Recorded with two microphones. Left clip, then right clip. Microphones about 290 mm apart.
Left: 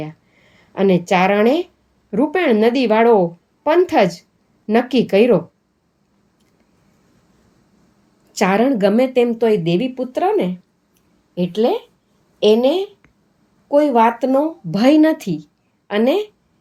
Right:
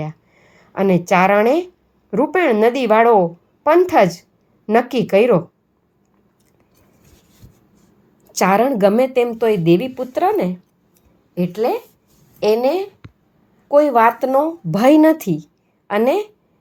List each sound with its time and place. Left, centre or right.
0.0 s a woman's voice: centre
8.3 s a woman's voice: centre